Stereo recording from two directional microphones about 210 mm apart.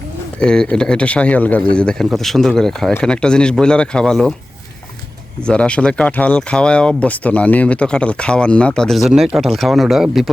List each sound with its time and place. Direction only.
0.3 s speech: 5° left (ahead or behind)
5.5 s speech: 5° left (ahead or behind)